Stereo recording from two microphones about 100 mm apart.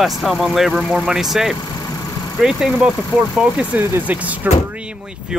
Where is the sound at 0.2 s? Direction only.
Centre (ahead or behind).